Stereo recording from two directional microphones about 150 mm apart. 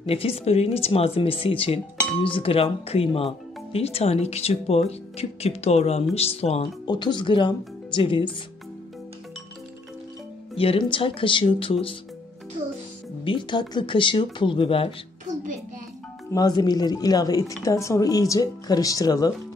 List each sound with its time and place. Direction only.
0.0 s speech: 40° left (ahead or behind)
6.9 s speech: 30° left (ahead or behind)
10.5 s speech: 40° left (ahead or behind)
13.2 s speech: 35° left (ahead or behind)
16.3 s speech: 25° left (ahead or behind)